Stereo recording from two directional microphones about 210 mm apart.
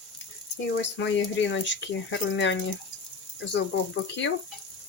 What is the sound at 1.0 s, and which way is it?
Speech, 60° left (ahead or behind).